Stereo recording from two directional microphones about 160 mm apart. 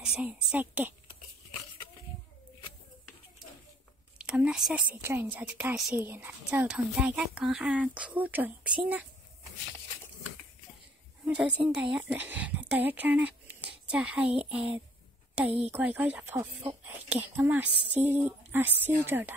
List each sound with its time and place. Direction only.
0.0 s a woman's voice: 5° right (ahead or behind)
4.3 s a woman's voice: 5° right (ahead or behind)
11.2 s a woman's voice: 10° right (ahead or behind)
17.6 s a sound: 90° right
17.9 s a woman's voice: 10° right (ahead or behind)